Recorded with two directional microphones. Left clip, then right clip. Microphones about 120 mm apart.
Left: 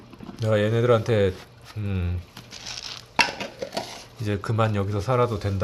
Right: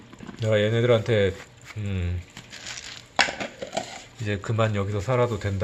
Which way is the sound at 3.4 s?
45° left (ahead or behind).